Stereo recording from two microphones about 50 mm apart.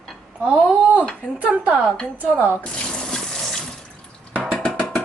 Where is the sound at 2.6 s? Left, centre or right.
Left.